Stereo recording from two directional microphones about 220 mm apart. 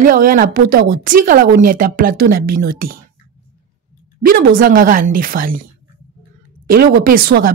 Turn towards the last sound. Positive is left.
turn(degrees=-45)  # may be behind; listen again after turning